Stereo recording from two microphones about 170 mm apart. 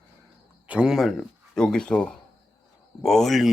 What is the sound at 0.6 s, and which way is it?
Speech, 5° right (ahead or behind).